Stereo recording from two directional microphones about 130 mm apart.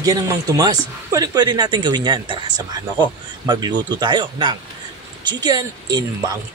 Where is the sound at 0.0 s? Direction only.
25° right (ahead or behind).